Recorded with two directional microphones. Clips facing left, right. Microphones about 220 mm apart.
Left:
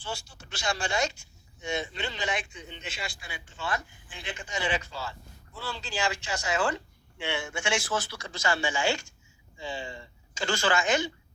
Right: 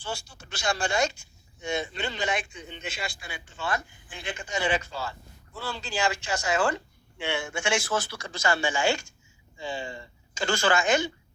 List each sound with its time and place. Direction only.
0.0 s speech: 45° right (ahead or behind)